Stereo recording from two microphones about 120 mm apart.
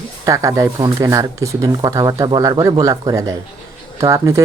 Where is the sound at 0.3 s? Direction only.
25° right (ahead or behind).